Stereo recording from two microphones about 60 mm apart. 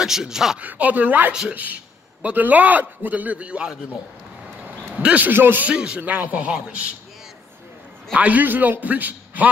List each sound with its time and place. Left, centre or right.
0.0 s speech: centre
0.6 s a man's voice: right
4.9 s speech: right
5.3 s speech: right
5.7 s a man's voice: centre
8.1 s a man's voice: right